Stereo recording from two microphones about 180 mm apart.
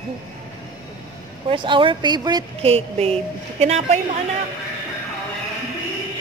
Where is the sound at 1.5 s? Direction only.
25° right (ahead or behind).